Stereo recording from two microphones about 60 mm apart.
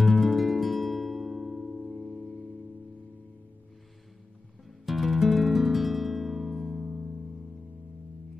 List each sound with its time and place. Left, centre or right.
0.0 s music: centre
4.8 s music: centre